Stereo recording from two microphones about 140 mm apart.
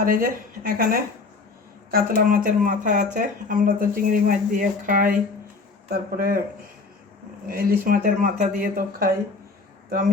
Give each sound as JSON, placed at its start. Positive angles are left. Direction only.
{"t": 0.0, "sound": "speech", "side_deg": -90}
{"t": 7.4, "sound": "speech", "side_deg": -90}